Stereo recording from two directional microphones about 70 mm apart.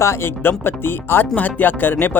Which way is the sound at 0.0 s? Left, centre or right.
Left.